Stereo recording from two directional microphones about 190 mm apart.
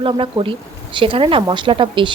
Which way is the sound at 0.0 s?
25° right (ahead or behind).